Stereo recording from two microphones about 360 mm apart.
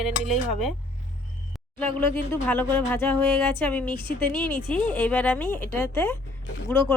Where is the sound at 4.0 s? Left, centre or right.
Centre.